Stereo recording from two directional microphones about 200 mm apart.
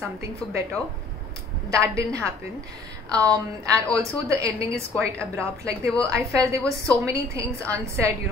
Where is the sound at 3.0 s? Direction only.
5° left (ahead or behind).